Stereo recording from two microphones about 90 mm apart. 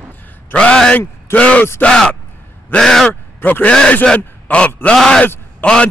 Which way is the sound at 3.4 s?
20° left (ahead or behind).